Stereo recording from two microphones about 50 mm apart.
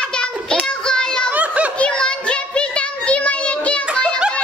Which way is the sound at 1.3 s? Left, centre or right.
Right.